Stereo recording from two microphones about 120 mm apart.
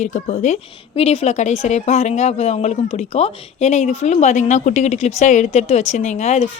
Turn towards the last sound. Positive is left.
turn(degrees=70)  # may be behind; listen again after turning